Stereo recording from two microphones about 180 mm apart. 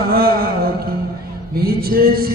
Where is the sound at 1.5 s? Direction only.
55° right (ahead or behind).